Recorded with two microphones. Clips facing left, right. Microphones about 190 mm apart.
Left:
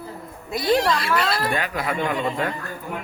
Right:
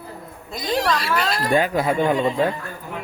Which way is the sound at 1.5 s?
30° right (ahead or behind).